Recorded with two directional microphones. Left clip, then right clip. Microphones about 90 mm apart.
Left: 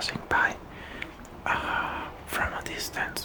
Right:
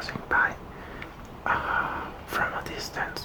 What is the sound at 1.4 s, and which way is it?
Speech, 5° left (ahead or behind).